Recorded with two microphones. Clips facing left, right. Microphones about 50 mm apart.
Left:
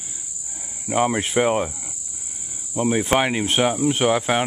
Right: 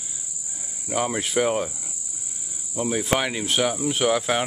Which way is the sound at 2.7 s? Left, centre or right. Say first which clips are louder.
Left 4 dB; left.